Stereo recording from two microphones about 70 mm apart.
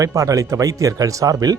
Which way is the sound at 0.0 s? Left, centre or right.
Right.